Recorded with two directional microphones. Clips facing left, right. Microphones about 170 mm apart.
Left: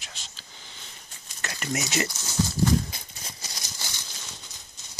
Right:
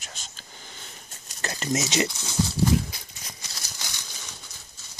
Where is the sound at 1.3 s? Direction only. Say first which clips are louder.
Right 4 dB; 30° right (ahead or behind).